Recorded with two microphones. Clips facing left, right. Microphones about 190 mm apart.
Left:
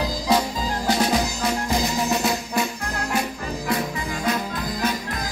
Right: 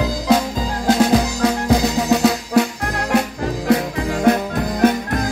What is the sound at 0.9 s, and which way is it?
Music, 70° right (ahead or behind).